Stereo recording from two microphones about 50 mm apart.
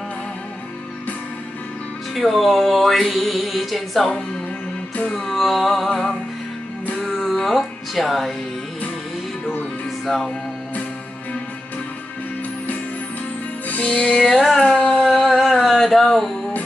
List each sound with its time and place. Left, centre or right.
2.1 s speech: centre
4.9 s music: centre
5.2 s speech: centre
7.2 s music: centre
10.0 s speech: centre
13.8 s music: centre
14.2 s speech: centre
14.6 s a sound: centre
15.0 s music: centre